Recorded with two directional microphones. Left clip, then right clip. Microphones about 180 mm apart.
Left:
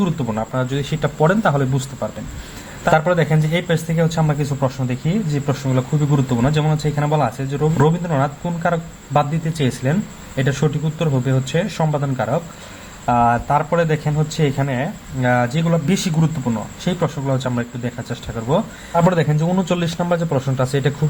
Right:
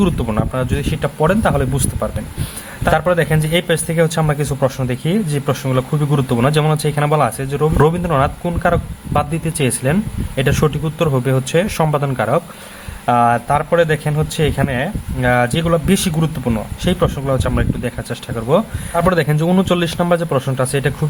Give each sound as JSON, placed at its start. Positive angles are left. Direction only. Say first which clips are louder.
{"t": 0.0, "sound": "a man's voice", "louder": "right 4 dB", "side_deg": -40}
{"t": 0.5, "sound": "a man's voice", "louder": "right 2 dB", "side_deg": -20}